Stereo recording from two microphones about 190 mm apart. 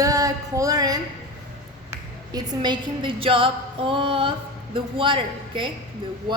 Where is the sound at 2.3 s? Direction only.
20° right (ahead or behind).